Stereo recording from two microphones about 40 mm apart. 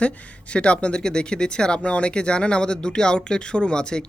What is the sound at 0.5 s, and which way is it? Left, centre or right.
Speech, left.